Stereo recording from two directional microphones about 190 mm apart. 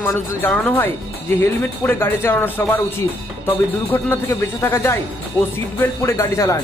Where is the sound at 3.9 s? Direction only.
10° left (ahead or behind).